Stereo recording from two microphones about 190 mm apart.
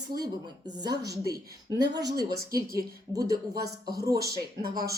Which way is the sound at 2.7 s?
20° right (ahead or behind).